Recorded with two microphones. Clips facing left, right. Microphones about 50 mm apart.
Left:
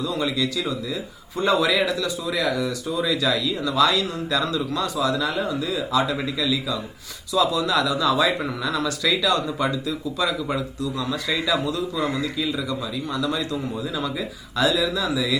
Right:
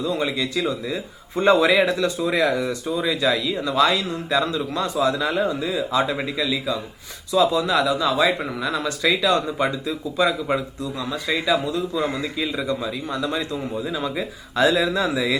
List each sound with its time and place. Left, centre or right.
0.0 s a man's voice: right
11.1 s a man's voice: centre; by 15.4 s right